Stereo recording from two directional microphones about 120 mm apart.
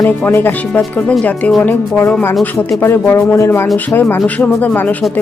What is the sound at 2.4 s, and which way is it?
Speech, 20° left (ahead or behind).